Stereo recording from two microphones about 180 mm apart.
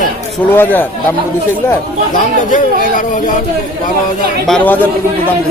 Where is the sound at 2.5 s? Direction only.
45° left (ahead or behind).